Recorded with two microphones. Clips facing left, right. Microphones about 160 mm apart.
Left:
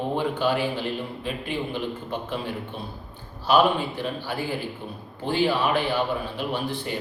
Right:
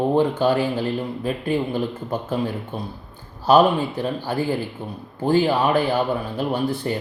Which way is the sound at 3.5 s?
40° right (ahead or behind).